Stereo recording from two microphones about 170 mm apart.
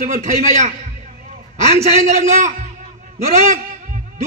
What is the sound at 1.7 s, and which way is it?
A man's voice, 40° right (ahead or behind).